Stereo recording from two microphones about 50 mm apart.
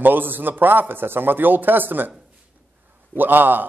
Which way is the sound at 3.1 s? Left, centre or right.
Right.